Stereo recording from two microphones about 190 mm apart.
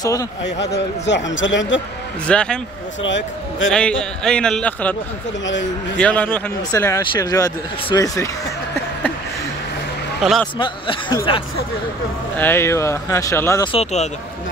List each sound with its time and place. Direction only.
0.0 s speech: 20° left (ahead or behind)
0.6 s a man's voice: 65° left (ahead or behind)
2.2 s speech: 5° left (ahead or behind)
3.0 s a man's voice: 75° left (ahead or behind)
3.7 s speech: 5° left (ahead or behind)
5.4 s a man's voice: 75° left (ahead or behind)
5.9 s speech: 10° left (ahead or behind)
10.2 s speech: centre (ahead or behind)
10.6 s speech: 25° left (ahead or behind)
12.4 s speech: 10° left (ahead or behind)
13.7 s speech: 30° left (ahead or behind)